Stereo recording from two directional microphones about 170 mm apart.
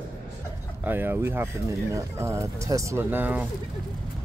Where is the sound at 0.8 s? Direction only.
10° right (ahead or behind).